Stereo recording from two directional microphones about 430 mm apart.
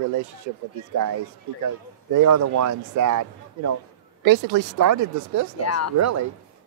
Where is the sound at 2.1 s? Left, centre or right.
Right.